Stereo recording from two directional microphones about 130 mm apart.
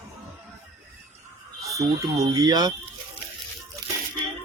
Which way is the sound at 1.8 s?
25° right (ahead or behind).